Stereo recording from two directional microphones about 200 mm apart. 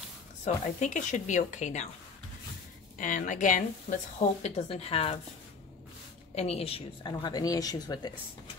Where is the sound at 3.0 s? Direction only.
40° left (ahead or behind).